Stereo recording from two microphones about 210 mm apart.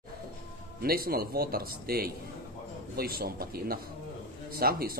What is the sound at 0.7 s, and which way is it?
Speech, 45° right (ahead or behind).